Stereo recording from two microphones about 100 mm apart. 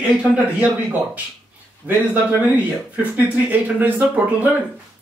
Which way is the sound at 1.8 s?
15° right (ahead or behind).